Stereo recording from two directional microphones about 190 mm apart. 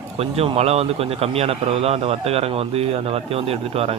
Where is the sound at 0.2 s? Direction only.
30° right (ahead or behind).